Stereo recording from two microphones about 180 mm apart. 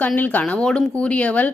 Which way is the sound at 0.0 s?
10° left (ahead or behind).